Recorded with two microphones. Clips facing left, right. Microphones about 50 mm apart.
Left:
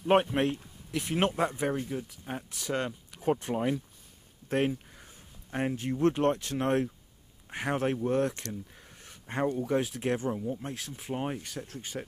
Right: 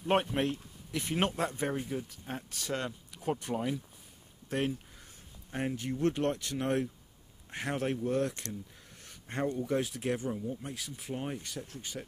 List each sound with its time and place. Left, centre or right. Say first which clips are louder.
0.0 s speech: left 4 dB; centre
1.3 s speech: left 4 dB; left
1.8 s speech: left 2 dB; centre
2.7 s speech: left 4 dB; left
9.0 s a sound: left 3 dB; centre
9.7 s speech: left 3 dB; centre
10.0 s speech: left 3 dB; left